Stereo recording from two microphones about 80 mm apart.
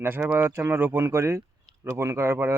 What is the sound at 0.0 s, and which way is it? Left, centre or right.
Speech, right.